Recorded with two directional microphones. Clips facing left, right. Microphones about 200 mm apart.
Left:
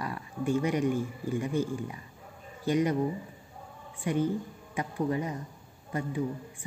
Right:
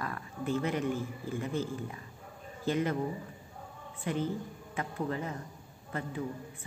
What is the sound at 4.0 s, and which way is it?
A man's voice, 10° left (ahead or behind).